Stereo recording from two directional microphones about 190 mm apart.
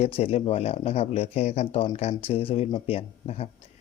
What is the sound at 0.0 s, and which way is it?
Speech, 30° left (ahead or behind).